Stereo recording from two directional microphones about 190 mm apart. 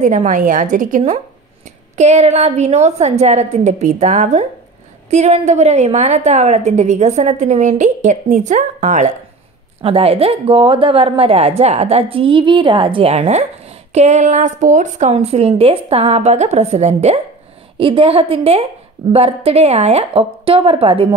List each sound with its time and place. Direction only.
0.0 s a woman's voice: 40° right (ahead or behind)